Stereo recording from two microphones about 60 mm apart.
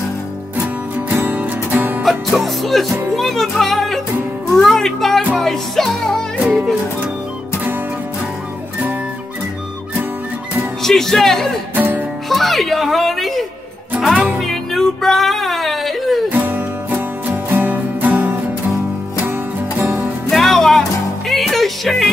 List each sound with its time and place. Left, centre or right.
1.2 s music: right
2.0 s music: centre
6.4 s music: centre
10.8 s speech: centre
11.7 s music: right
12.3 s speech: centre
14.4 s music: centre
16.3 s music: right
19.8 s music: right
20.2 s music: centre